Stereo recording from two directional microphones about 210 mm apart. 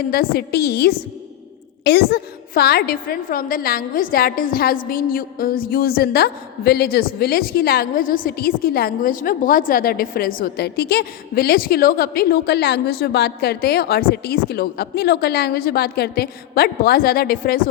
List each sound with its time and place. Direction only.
0.1 s a woman's voice: 45° left (ahead or behind)